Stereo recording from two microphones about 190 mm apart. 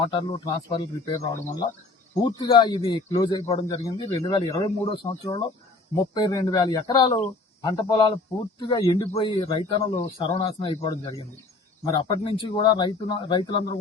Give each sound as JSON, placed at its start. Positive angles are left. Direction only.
{"t": 0.1, "sound": "a man's voice", "side_deg": 25}
{"t": 3.4, "sound": "a man's voice", "side_deg": 30}
{"t": 11.9, "sound": "a man's voice", "side_deg": 25}